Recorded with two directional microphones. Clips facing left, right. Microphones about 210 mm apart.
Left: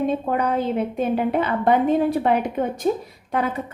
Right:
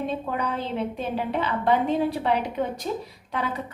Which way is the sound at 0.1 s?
50° left (ahead or behind).